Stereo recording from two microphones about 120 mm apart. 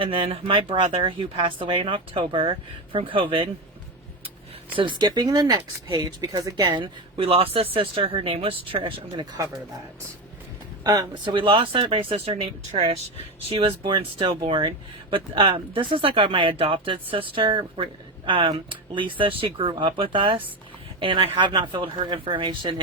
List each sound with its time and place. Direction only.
0.0 s speech: 50° right (ahead or behind)
4.8 s speech: 40° right (ahead or behind)
6.6 s speech: 40° right (ahead or behind)
10.8 s speech: 35° right (ahead or behind)